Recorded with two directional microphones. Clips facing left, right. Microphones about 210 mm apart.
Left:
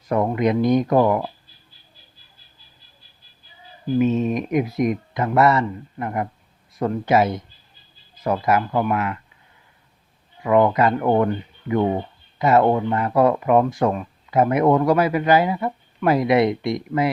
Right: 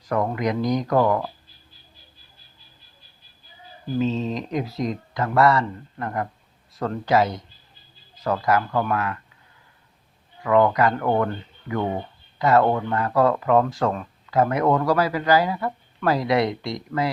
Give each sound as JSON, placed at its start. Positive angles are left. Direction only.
{"t": 0.0, "sound": "speech", "side_deg": 20}
{"t": 3.9, "sound": "speech", "side_deg": 20}
{"t": 10.4, "sound": "speech", "side_deg": 20}